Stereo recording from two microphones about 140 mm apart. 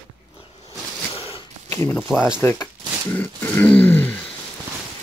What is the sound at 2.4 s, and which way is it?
Grunt, 15° left (ahead or behind).